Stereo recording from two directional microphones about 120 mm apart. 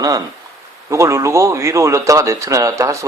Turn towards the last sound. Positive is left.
turn(degrees=-25)  # may be behind; listen again after turning